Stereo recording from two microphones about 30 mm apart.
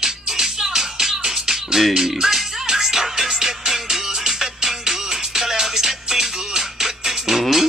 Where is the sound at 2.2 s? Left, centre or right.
Centre.